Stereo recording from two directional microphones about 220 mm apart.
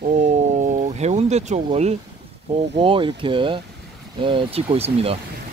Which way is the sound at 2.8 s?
25° right (ahead or behind).